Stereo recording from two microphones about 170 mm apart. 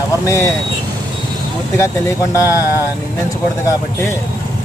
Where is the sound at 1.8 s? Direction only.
15° left (ahead or behind).